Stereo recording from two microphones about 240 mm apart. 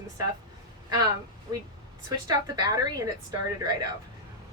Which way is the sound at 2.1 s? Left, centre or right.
Centre.